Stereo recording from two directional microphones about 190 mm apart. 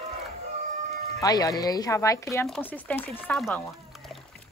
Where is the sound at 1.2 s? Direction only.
20° left (ahead or behind); by 4.1 s centre (ahead or behind).